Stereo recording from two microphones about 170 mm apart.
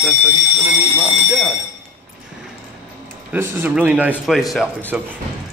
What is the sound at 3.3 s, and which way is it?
A man's voice, 15° right (ahead or behind).